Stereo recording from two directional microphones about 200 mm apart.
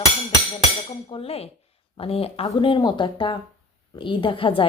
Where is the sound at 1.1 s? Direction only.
30° left (ahead or behind).